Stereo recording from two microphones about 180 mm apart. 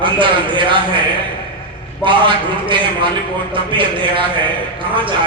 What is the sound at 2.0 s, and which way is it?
A man's voice, 30° right (ahead or behind).